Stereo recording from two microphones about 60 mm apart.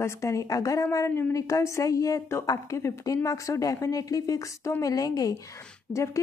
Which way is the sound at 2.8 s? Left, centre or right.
Left.